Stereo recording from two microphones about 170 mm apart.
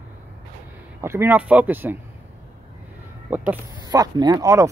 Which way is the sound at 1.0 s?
15° right (ahead or behind).